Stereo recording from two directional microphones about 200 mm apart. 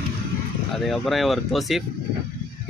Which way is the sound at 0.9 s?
Centre (ahead or behind).